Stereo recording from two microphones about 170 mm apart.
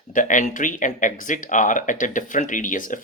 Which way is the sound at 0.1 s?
50° left (ahead or behind).